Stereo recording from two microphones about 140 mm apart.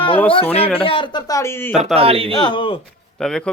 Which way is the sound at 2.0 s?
45° right (ahead or behind).